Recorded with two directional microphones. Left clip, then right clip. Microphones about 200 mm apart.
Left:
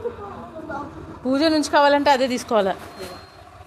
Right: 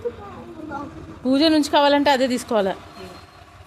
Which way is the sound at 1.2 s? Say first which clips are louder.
Right 2 dB; 15° right (ahead or behind).